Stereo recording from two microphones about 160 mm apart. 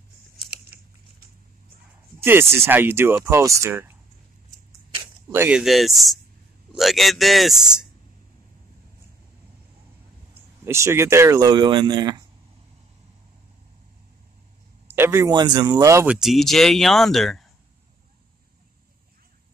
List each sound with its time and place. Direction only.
2.1 s speech: 15° right (ahead or behind)
5.3 s speech: 15° right (ahead or behind)
5.6 s speech: centre (ahead or behind)
10.6 s speech: 15° right (ahead or behind)
14.9 s speech: 15° right (ahead or behind)
16.2 s speech: centre (ahead or behind)